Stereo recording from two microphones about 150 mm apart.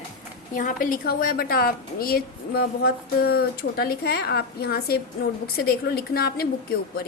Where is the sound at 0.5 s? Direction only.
65° left (ahead or behind).